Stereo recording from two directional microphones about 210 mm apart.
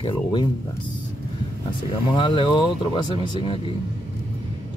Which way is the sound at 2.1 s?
25° left (ahead or behind).